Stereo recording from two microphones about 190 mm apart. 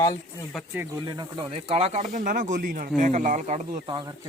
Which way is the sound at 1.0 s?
25° right (ahead or behind).